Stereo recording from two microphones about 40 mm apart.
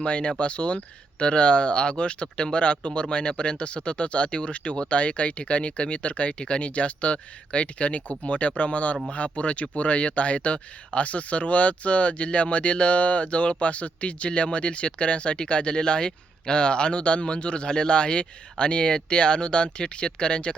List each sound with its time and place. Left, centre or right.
0.0 s speech: left